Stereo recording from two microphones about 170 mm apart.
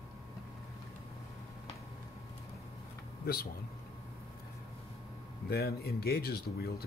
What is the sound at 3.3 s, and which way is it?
Speech, 60° left (ahead or behind).